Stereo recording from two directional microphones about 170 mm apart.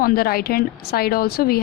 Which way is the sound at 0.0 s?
60° left (ahead or behind).